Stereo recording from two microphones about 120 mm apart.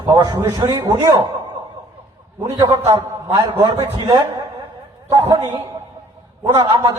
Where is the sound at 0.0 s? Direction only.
35° right (ahead or behind).